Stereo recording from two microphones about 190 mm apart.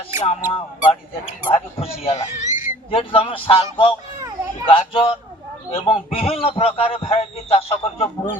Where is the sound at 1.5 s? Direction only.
30° left (ahead or behind).